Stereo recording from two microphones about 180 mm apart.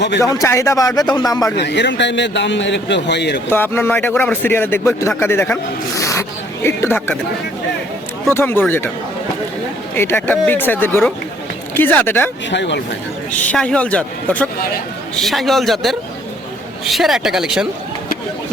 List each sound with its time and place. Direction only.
0.2 s speech: 15° left (ahead or behind)
1.5 s a man's voice: 70° left (ahead or behind)
3.5 s speech: 10° left (ahead or behind)
8.3 s speech: 10° left (ahead or behind)
9.9 s speech: 10° left (ahead or behind)
12.5 s speech: 80° left
13.5 s a man's voice: 5° left (ahead or behind)